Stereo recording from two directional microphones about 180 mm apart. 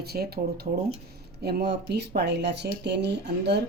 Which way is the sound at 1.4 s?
70° right (ahead or behind).